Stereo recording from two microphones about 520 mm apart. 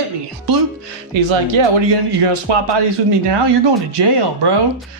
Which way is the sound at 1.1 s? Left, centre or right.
Right.